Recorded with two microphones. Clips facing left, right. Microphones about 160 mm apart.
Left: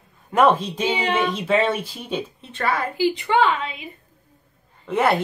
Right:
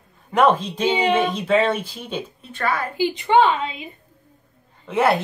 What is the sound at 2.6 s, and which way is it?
Speech, 25° left (ahead or behind).